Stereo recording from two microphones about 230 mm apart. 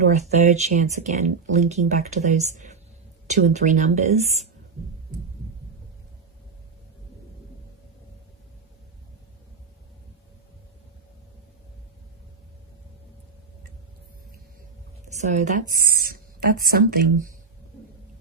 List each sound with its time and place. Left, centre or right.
0.1 s speech: right
15.1 s a woman's voice: right